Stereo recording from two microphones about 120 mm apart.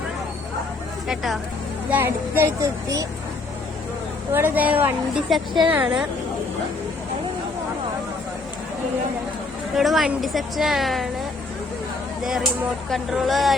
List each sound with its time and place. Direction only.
1.0 s speech: centre (ahead or behind)
1.9 s speech: 15° right (ahead or behind)
4.3 s speech: 20° right (ahead or behind)
5.3 s a woman's voice: centre (ahead or behind)
5.6 s speech: 10° right (ahead or behind)
9.7 s a woman's voice: centre (ahead or behind)
12.9 s a woman's voice: centre (ahead or behind)